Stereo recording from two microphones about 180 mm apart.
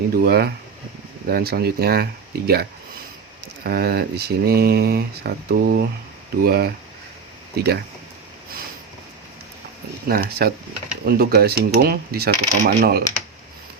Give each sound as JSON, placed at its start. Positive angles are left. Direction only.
{"t": 0.1, "sound": "speech", "side_deg": -60}
{"t": 10.1, "sound": "speech", "side_deg": -60}